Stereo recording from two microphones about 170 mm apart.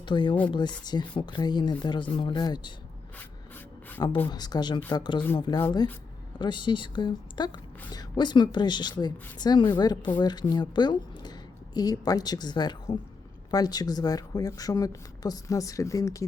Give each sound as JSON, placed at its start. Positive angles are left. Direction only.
{"t": 0.0, "sound": "speech", "side_deg": 25}
{"t": 4.3, "sound": "a woman's voice", "side_deg": 25}